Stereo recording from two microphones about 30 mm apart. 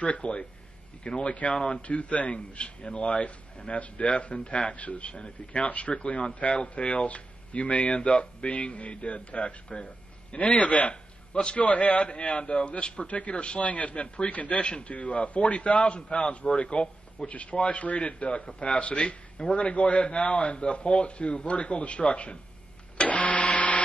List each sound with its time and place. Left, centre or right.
0.0 s a man's voice: left
4.7 s a man's voice: left
5.7 s a man's voice: left
12.1 s a man's voice: left
14.9 s a man's voice: left
18.5 s a man's voice: left
18.8 s a man's voice: left
23.0 s printer: left